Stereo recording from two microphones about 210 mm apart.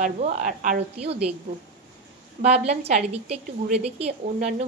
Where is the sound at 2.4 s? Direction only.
30° right (ahead or behind).